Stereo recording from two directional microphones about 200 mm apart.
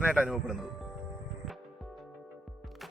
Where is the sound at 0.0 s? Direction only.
5° right (ahead or behind).